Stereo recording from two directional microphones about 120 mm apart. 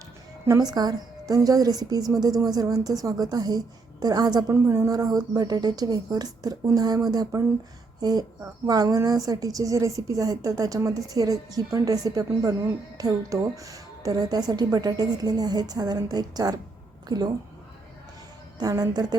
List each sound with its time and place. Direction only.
0.4 s a woman's voice: 30° right (ahead or behind)
4.5 s a woman's voice: 20° right (ahead or behind)
8.4 s a woman's voice: 30° right (ahead or behind)
18.6 s a woman's voice: 35° right (ahead or behind)